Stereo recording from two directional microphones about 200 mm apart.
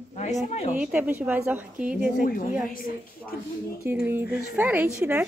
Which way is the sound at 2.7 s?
45° left (ahead or behind).